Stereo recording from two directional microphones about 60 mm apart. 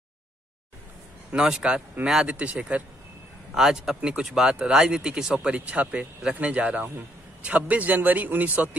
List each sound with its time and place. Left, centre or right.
1.3 s a man's voice: centre
3.5 s a man's voice: centre; by 8.6 s right